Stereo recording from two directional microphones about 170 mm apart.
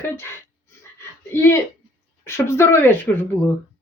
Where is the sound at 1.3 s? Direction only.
15° left (ahead or behind).